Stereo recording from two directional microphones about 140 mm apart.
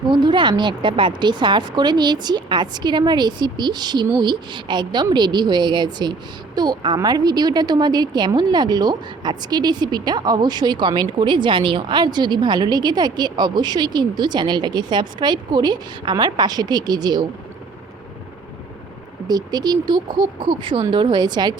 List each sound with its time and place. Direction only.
0.1 s speech: 35° right (ahead or behind)
19.3 s speech: 30° right (ahead or behind)